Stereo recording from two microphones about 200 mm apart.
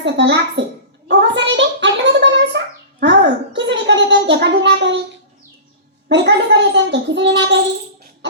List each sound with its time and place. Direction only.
0.0 s a child's voice: 60° right (ahead or behind)
1.0 s a sound: 60° right (ahead or behind)
6.1 s a child's voice: 60° right (ahead or behind)